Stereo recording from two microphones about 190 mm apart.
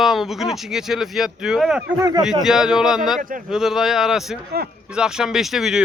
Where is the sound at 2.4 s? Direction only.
5° right (ahead or behind).